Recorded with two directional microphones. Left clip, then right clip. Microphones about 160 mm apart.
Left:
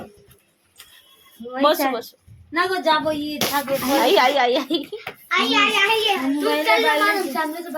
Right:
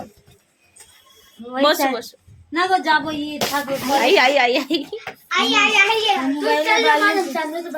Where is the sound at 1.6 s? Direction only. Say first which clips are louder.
Right 1 dB; 15° right (ahead or behind).